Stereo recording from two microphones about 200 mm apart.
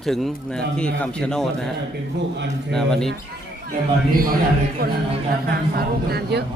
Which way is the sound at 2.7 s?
Centre (ahead or behind).